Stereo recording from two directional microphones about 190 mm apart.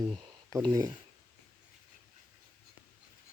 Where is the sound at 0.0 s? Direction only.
25° right (ahead or behind).